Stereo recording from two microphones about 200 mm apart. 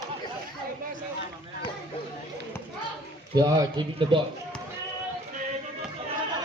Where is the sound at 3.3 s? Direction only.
20° right (ahead or behind).